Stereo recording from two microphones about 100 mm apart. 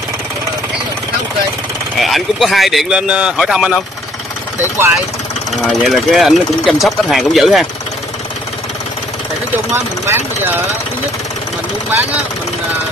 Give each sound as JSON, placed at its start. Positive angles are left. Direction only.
{"t": 2.0, "sound": "speech", "side_deg": 0}
{"t": 4.7, "sound": "speech", "side_deg": -25}
{"t": 5.7, "sound": "speech", "side_deg": 0}
{"t": 9.8, "sound": "speech", "side_deg": -25}